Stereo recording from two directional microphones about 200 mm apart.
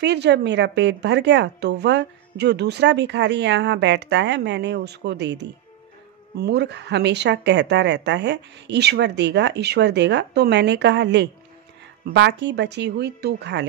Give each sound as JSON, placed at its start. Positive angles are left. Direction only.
{"t": 0.0, "sound": "speech", "side_deg": -60}